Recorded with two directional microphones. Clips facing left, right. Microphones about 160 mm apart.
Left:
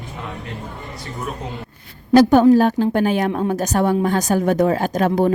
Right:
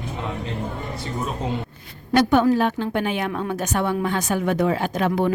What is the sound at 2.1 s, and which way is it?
A woman's voice, 35° left (ahead or behind).